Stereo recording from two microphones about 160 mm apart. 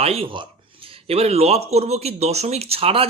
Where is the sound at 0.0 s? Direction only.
35° right (ahead or behind).